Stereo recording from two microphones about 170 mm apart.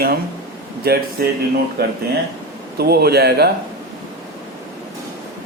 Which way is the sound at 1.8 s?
70° right (ahead or behind).